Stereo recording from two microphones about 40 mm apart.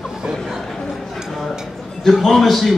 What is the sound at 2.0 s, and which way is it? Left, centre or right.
Speech, centre.